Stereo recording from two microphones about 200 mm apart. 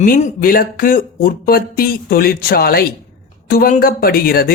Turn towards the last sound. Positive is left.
turn(degrees=50)  # may be behind; listen again after turning